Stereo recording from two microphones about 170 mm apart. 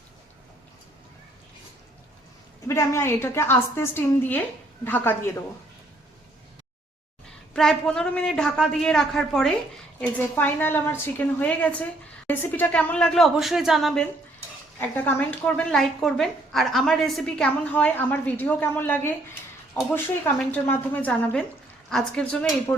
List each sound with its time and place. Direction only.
2.6 s a woman's voice: 15° left (ahead or behind)
7.5 s a man's voice: centre (ahead or behind)
14.8 s a woman's voice: 10° left (ahead or behind)